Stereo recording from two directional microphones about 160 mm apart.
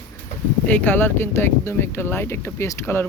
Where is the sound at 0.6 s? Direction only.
10° left (ahead or behind).